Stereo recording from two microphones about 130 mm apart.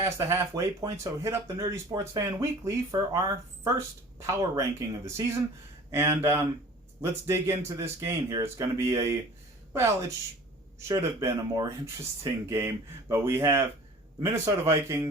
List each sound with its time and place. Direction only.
0.0 s speech: 20° right (ahead or behind)
5.0 s speech: 25° right (ahead or behind)